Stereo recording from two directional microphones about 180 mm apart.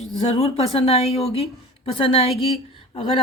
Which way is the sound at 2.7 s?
30° left (ahead or behind).